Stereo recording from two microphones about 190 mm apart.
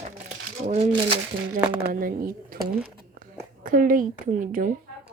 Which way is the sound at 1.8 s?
50° right (ahead or behind).